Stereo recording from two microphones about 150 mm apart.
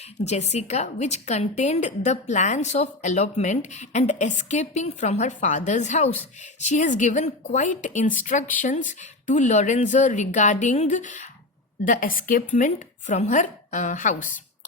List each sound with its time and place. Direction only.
0.3 s a woman's voice: 50° left (ahead or behind)